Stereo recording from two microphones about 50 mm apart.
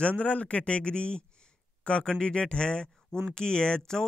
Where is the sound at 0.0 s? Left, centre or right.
Left.